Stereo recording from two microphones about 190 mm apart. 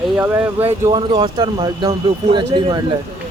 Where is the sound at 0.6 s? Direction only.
25° right (ahead or behind).